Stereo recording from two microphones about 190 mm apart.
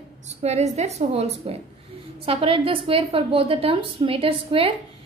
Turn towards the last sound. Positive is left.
turn(degrees=-30)  # may be behind; listen again after turning